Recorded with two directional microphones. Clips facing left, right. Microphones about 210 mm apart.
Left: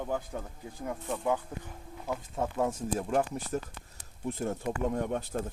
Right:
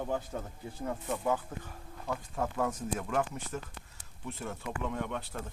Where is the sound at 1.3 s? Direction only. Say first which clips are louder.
Left 2 dB; 10° left (ahead or behind).